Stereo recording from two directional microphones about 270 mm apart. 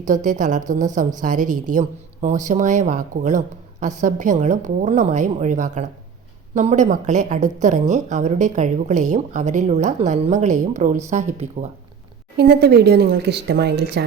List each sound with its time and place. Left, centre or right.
0.0 s a woman's voice: right